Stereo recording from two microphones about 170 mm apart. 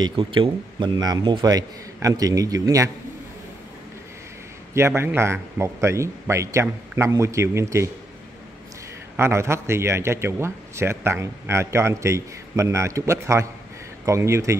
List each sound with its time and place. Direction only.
0.0 s a man's voice: 30° right (ahead or behind)
4.7 s a man's voice: 15° right (ahead or behind)
9.1 s a man's voice: 15° right (ahead or behind)